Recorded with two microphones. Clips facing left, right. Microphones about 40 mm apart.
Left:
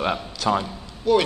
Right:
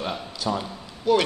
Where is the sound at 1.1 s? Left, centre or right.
Centre.